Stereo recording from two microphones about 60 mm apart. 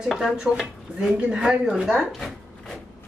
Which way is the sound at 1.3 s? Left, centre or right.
Centre.